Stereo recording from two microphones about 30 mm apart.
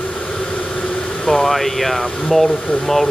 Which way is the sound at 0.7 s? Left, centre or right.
Left.